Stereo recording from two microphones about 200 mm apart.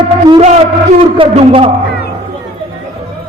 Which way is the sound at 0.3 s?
25° right (ahead or behind).